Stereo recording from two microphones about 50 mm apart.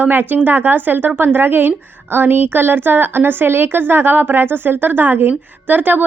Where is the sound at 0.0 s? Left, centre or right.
Right.